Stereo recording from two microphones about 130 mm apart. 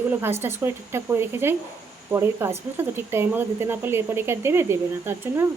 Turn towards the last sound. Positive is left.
turn(degrees=-20)  # may be behind; listen again after turning